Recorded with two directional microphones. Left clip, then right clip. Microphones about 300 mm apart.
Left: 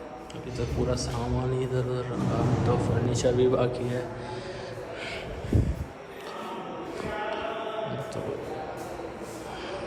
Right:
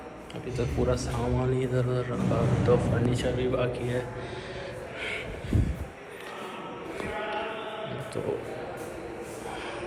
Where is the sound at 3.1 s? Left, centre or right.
Centre.